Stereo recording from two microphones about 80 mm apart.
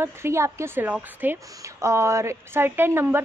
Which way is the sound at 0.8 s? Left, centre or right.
Right.